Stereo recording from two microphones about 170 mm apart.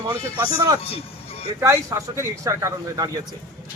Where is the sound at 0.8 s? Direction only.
35° left (ahead or behind).